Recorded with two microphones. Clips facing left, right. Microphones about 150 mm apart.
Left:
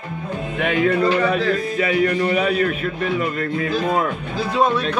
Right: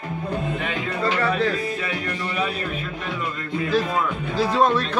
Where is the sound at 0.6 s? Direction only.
70° left (ahead or behind).